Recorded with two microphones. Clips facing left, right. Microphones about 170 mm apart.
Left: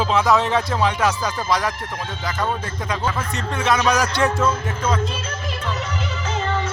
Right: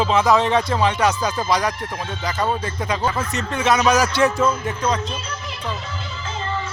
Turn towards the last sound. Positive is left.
turn(degrees=80)